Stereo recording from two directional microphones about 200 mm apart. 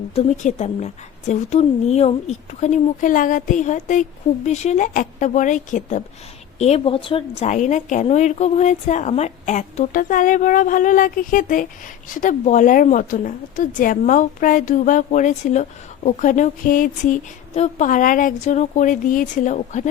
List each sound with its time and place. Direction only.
0.1 s speech: 35° left (ahead or behind)